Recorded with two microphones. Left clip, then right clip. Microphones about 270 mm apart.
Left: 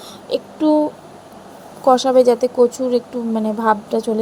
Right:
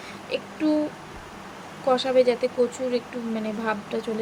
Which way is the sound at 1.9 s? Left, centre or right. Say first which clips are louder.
Left 8 dB; left.